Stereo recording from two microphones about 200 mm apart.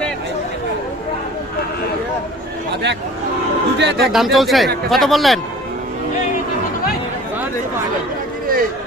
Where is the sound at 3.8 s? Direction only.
60° right (ahead or behind).